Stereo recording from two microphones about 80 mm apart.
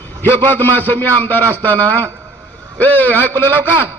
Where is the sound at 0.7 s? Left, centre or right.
Left.